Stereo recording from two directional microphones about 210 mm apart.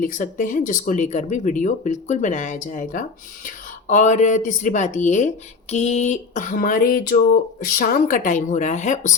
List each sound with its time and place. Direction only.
0.0 s speech: 40° left (ahead or behind)